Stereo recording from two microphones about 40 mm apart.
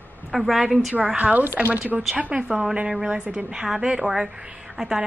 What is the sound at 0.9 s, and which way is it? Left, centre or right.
A woman's voice, right.